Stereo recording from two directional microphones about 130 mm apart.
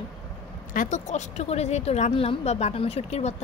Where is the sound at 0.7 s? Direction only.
80° left.